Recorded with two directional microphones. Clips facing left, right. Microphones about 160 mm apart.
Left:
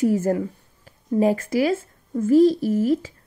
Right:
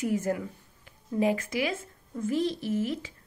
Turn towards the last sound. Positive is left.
turn(degrees=40)  # may be behind; listen again after turning